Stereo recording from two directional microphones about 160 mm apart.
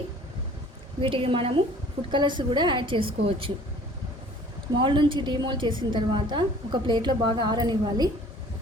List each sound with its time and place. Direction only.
1.0 s a woman's voice: 35° right (ahead or behind)
4.8 s a woman's voice: 30° right (ahead or behind)